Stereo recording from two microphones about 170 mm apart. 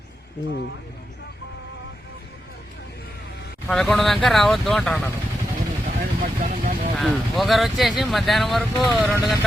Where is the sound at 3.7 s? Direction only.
Centre (ahead or behind).